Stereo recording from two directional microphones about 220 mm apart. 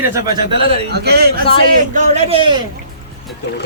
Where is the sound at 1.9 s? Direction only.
30° right (ahead or behind).